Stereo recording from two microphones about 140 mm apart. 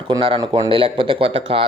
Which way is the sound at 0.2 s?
40° right (ahead or behind).